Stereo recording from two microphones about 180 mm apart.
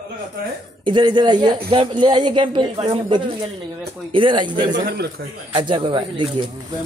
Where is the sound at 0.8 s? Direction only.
25° right (ahead or behind).